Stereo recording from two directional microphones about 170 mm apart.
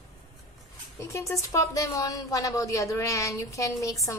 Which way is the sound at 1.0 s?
15° left (ahead or behind).